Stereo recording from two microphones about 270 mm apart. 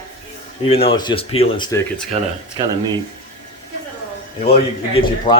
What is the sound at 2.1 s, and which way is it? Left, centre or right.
Speech, right.